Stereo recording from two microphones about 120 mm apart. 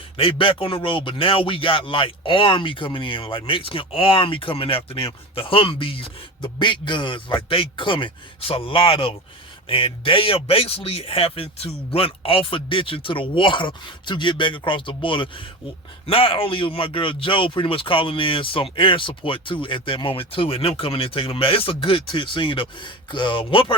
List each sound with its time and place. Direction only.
0.2 s a man's voice: 45° left (ahead or behind)